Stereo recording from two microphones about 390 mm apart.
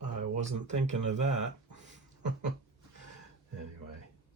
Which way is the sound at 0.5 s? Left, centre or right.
Right.